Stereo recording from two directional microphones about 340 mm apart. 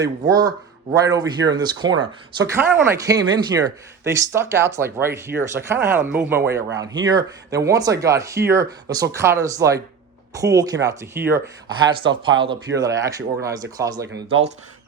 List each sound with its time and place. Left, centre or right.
0.0 s speech: centre